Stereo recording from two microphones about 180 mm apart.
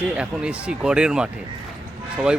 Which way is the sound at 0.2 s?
5° right (ahead or behind).